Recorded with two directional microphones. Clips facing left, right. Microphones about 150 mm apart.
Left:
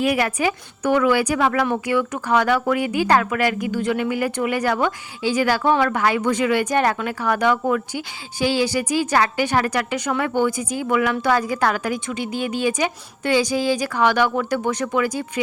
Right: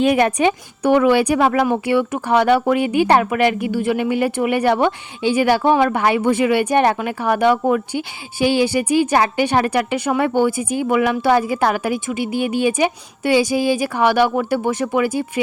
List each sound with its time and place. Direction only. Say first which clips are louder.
0.0 s a woman's voice: right 5 dB; 30° right (ahead or behind)
0.9 s a woman's voice: right 4 dB; 20° right (ahead or behind)